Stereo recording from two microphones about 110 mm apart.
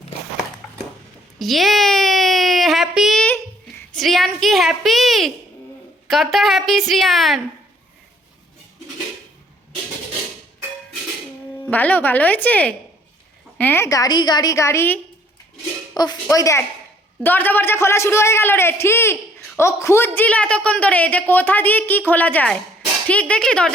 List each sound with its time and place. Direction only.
1.4 s a sound: centre (ahead or behind)
3.2 s a sound: 20° left (ahead or behind)
3.9 s a woman's voice: centre (ahead or behind)
11.6 s a woman's voice: 15° left (ahead or behind)
13.8 s a man's voice: 30° left (ahead or behind)
16.0 s a man's voice: 35° left (ahead or behind)
17.2 s a man's voice: 15° left (ahead or behind)